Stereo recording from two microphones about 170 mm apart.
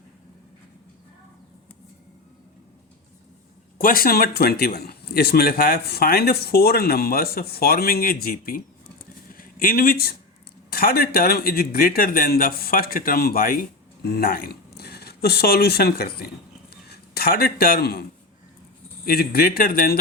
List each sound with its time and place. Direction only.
3.8 s a man's voice: 60° left (ahead or behind)
19.0 s a man's voice: 60° left (ahead or behind)